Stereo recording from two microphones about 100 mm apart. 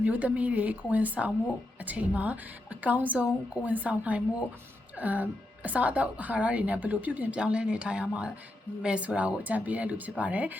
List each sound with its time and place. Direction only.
0.0 s a woman's voice: 15° right (ahead or behind)